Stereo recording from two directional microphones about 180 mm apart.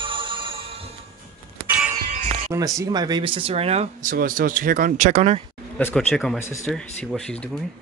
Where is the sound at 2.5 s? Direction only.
20° right (ahead or behind); by 5.4 s 35° right (ahead or behind).